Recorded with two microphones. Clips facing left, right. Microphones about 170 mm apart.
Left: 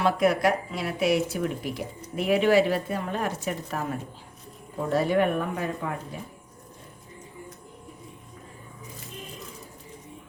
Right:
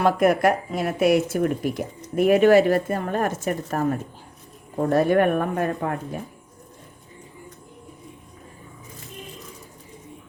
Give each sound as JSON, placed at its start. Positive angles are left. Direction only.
{"t": 0.0, "sound": "speech", "side_deg": -50}